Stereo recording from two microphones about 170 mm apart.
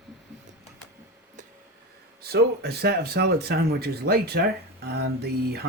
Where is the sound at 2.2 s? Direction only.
65° right (ahead or behind).